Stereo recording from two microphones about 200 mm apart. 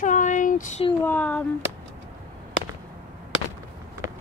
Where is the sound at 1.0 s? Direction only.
5° left (ahead or behind).